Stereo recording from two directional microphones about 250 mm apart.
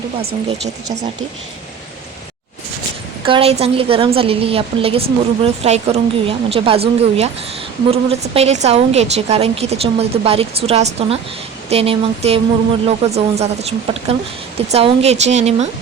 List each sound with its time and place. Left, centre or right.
3.2 s a woman's voice: right